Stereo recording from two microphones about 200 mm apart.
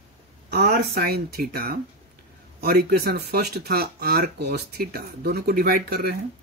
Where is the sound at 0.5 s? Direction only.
55° right (ahead or behind).